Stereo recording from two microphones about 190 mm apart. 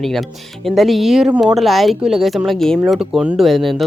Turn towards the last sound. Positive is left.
turn(degrees=0)  # may be behind; listen again after turning